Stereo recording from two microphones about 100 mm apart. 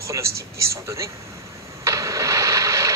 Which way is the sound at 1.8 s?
35° right (ahead or behind).